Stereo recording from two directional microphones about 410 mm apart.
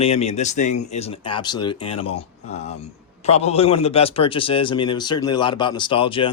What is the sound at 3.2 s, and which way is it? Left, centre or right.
Speech, centre.